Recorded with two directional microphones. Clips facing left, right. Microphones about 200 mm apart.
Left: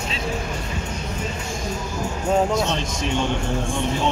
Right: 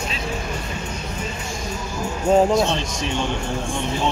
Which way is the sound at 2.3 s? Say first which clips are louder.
Right 4 dB; 30° right (ahead or behind).